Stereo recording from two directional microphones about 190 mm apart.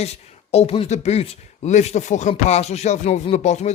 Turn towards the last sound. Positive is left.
turn(degrees=35)  # may be behind; listen again after turning